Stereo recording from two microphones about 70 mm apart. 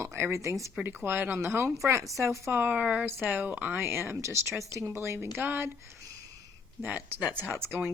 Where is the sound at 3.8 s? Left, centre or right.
Right.